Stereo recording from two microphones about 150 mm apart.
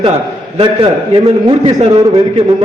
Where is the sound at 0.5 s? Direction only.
40° right (ahead or behind).